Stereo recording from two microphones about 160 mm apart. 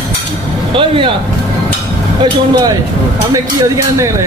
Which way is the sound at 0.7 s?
35° right (ahead or behind).